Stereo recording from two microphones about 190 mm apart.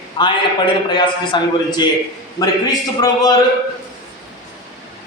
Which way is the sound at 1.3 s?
25° left (ahead or behind).